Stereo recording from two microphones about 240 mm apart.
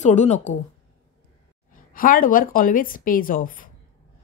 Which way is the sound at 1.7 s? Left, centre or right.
Left.